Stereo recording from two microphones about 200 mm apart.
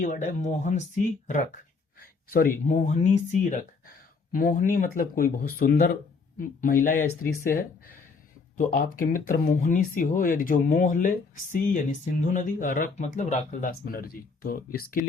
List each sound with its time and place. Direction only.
0.0 s speech: 40° left (ahead or behind)
2.3 s speech: 40° left (ahead or behind)